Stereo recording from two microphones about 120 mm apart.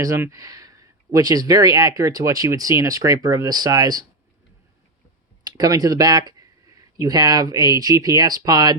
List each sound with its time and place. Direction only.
0.0 s speech: 30° right (ahead or behind)
5.5 s speech: 30° right (ahead or behind)